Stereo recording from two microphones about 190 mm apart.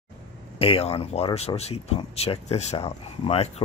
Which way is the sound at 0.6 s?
30° left (ahead or behind).